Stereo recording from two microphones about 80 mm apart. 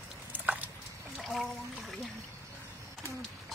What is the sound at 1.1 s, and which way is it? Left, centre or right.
Water, centre.